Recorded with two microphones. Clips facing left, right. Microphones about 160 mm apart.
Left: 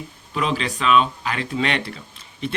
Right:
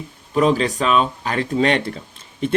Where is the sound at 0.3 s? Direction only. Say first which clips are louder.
Right 7 dB; 40° right (ahead or behind).